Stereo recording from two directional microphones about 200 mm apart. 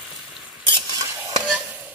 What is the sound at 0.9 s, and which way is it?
Stir, 20° right (ahead or behind).